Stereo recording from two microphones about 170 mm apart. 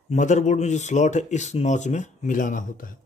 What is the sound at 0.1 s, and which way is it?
Speech, 45° left (ahead or behind).